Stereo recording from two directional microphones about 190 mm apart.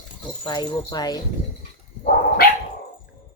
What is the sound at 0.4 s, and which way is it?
Speech, 20° left (ahead or behind).